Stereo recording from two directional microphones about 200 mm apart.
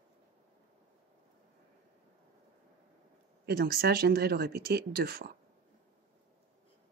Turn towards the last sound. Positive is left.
turn(degrees=-50)  # may be behind; listen again after turning